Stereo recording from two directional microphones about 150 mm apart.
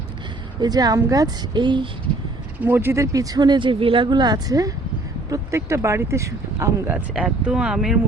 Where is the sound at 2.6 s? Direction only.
15° right (ahead or behind).